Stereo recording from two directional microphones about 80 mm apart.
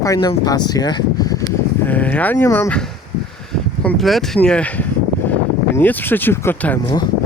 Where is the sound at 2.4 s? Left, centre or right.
Left.